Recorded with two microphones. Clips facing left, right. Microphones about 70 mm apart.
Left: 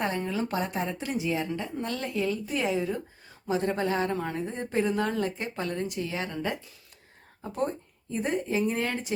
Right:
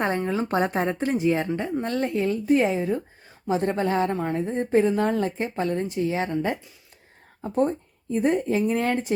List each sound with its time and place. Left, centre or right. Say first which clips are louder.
0.3 s a woman's voice: right 6 dB; right
8.1 s speech: right 6 dB; right